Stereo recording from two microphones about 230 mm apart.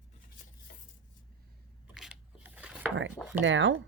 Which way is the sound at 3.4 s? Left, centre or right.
Right.